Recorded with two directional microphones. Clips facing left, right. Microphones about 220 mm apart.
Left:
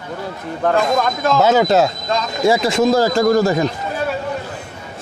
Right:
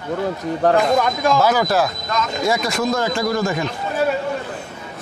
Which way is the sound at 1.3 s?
20° left (ahead or behind).